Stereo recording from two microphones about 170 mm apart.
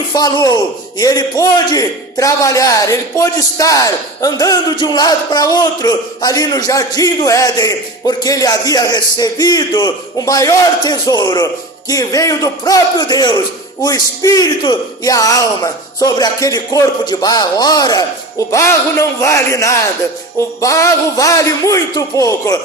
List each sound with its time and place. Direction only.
0.1 s a man's voice: 25° left (ahead or behind)